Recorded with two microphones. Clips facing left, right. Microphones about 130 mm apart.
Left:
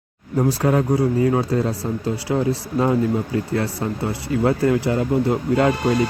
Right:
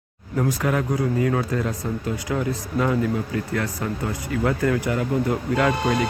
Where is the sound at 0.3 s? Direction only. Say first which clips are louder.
Left 4 dB; 35° left (ahead or behind).